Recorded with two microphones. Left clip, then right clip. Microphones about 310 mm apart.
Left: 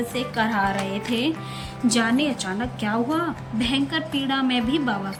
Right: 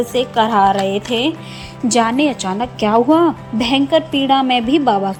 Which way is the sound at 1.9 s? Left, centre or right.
Centre.